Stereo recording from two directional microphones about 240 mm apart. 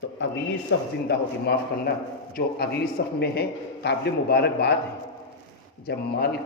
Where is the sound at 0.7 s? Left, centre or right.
Left.